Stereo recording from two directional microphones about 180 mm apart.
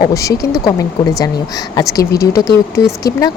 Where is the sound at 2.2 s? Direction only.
20° left (ahead or behind).